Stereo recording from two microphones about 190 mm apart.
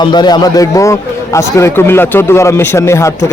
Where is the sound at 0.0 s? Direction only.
20° left (ahead or behind).